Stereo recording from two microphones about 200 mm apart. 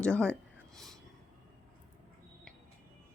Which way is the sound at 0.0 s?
5° left (ahead or behind).